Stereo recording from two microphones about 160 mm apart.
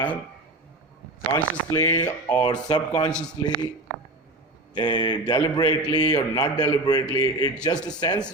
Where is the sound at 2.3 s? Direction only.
25° left (ahead or behind).